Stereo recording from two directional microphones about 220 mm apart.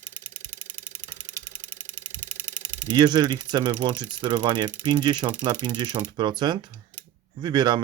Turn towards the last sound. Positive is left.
turn(degrees=-20)  # may be behind; listen again after turning